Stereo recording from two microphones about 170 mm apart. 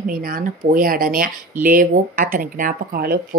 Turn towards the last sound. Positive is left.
turn(degrees=-60)  # may be behind; listen again after turning